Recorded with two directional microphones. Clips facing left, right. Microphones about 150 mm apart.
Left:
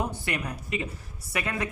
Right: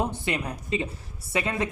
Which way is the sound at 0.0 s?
25° right (ahead or behind).